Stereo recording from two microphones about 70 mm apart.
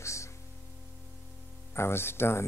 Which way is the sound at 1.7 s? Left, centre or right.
Left.